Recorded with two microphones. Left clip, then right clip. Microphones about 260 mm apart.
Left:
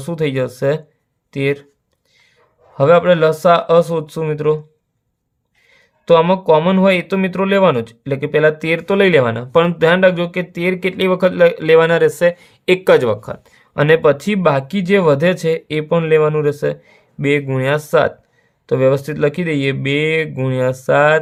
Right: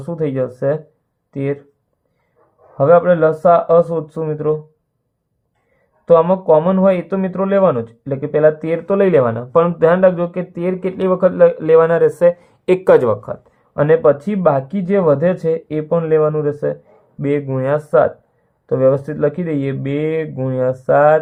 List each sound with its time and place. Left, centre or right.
0.0 s speech: left
2.7 s speech: left
6.1 s speech: left